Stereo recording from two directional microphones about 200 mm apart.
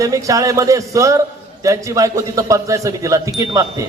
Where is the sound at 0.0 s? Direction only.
15° right (ahead or behind).